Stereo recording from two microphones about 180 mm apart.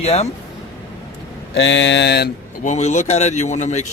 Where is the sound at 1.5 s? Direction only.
85° left; by 2.3 s 70° left (ahead or behind).